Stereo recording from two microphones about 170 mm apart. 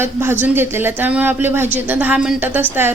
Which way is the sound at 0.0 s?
15° right (ahead or behind).